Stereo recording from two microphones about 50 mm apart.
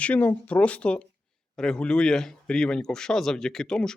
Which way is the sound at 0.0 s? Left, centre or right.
Left.